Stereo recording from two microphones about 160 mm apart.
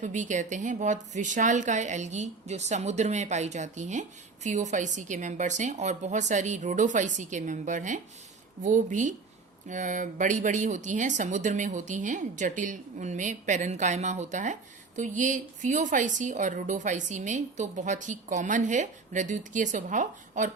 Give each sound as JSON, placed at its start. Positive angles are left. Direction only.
{"t": 0.0, "sound": "speech", "side_deg": -50}